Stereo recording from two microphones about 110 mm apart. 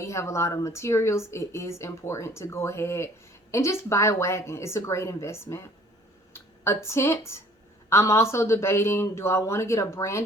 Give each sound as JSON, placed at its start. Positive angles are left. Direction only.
{"t": 0.0, "sound": "a woman's voice", "side_deg": 25}
{"t": 6.8, "sound": "a woman's voice", "side_deg": 25}